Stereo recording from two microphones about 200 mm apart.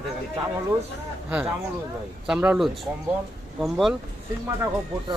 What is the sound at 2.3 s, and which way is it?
Speech, 5° right (ahead or behind).